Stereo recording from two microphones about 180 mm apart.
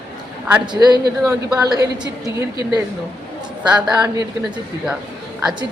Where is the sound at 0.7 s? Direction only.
25° right (ahead or behind).